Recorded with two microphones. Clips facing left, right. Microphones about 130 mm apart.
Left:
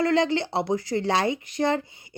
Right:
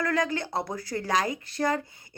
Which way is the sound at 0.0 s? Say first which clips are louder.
Left 5 dB; 25° left (ahead or behind).